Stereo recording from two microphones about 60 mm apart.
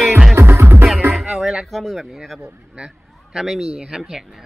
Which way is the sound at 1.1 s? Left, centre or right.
Centre.